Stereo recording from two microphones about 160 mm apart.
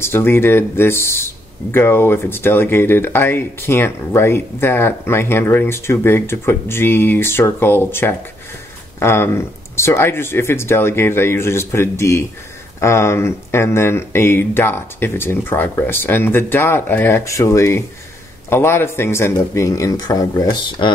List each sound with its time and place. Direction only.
0.0 s speech: 15° left (ahead or behind)